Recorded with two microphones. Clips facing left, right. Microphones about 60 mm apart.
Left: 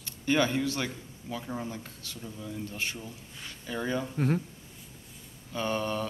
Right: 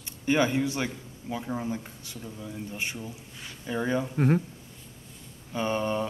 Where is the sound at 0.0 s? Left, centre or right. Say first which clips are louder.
Right 2 dB; centre.